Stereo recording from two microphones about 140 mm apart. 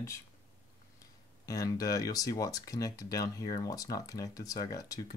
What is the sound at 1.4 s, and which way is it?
Speech, 25° left (ahead or behind).